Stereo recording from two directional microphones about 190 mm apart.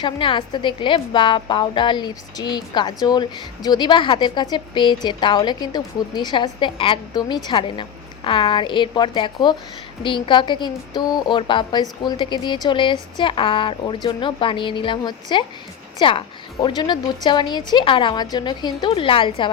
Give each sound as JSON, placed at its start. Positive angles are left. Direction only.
{"t": 0.0, "sound": "a woman's voice", "side_deg": 25}